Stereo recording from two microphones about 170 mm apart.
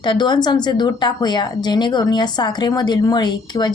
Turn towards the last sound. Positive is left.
turn(degrees=25)  # may be behind; listen again after turning